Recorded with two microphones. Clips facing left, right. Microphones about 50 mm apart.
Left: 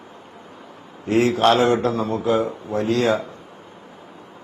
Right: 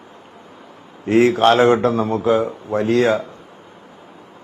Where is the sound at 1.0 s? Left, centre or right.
Right.